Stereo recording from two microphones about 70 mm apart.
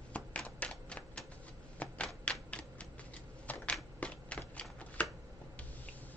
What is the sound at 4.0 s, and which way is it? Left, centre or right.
Shuffling cards, centre.